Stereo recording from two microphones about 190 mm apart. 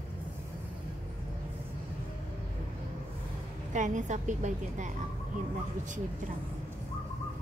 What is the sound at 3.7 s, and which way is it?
A woman's voice, 40° right (ahead or behind).